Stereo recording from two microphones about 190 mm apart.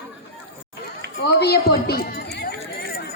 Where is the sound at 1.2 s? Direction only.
55° left (ahead or behind).